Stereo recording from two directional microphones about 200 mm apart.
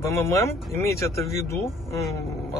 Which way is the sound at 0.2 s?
15° left (ahead or behind).